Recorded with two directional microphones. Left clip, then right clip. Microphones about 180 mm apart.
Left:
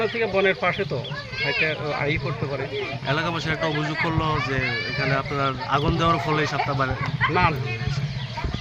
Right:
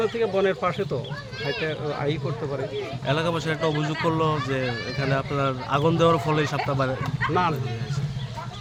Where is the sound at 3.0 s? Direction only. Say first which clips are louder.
Right 1 dB; 65° right (ahead or behind).